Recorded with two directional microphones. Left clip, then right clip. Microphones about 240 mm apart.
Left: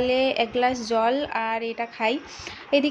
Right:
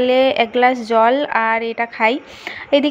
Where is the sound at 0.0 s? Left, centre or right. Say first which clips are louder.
Right 8 dB; centre.